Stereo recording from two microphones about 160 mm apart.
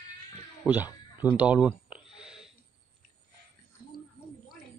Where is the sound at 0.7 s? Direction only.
10° right (ahead or behind).